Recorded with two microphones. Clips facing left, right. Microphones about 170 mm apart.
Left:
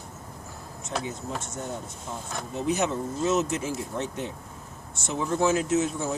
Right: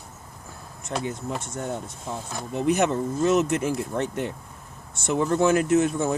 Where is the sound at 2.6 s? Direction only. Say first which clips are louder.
Right 5 dB; 60° right (ahead or behind).